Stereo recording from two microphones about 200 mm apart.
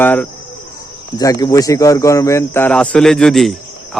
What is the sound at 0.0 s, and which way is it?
Speech, 10° left (ahead or behind).